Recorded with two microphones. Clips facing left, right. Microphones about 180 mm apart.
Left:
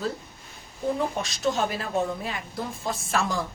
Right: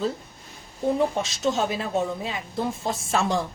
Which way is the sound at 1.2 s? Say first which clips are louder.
Right 2 dB; 20° right (ahead or behind).